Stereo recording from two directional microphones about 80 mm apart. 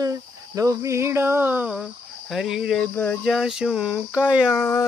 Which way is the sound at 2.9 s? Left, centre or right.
Left.